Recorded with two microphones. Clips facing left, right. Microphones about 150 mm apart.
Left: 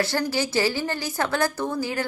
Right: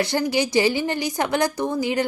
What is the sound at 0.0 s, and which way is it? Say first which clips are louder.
A woman's voice: right 3 dB; 15° right (ahead or behind).